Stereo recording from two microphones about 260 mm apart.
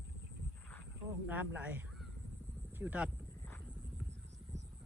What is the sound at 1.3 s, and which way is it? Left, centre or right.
Speech, centre.